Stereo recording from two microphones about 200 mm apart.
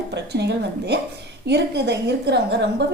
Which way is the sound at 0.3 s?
55° right (ahead or behind).